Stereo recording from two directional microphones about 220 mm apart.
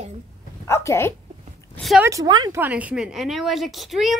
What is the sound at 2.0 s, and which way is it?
A woman's voice, 15° right (ahead or behind).